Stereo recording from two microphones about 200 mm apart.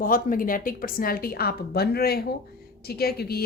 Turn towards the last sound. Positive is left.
turn(degrees=50)  # may be behind; listen again after turning